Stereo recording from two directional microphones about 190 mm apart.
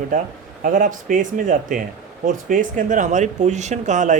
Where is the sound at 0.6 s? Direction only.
45° right (ahead or behind).